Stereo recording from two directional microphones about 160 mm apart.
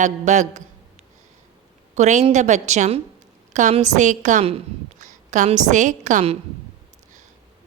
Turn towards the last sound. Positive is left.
turn(degrees=-50)  # may be behind; listen again after turning